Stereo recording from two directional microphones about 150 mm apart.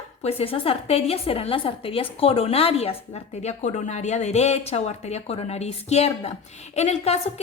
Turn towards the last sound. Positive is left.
turn(degrees=45)  # may be behind; listen again after turning